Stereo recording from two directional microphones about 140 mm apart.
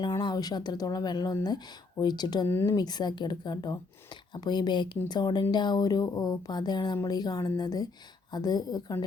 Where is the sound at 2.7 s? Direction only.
30° left (ahead or behind).